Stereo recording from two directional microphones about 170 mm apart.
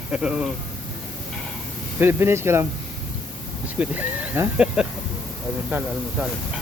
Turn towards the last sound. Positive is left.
turn(degrees=-10)  # may be behind; listen again after turning